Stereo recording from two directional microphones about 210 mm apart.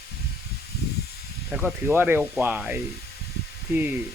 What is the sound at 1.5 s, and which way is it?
Speech, 5° right (ahead or behind).